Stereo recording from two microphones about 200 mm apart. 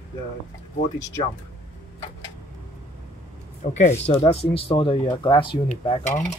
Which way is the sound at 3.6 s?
35° left (ahead or behind).